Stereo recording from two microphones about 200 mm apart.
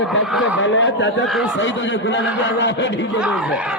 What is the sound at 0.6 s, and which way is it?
Speech, 70° left (ahead or behind).